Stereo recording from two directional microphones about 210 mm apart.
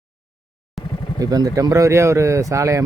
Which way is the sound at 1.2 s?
15° right (ahead or behind).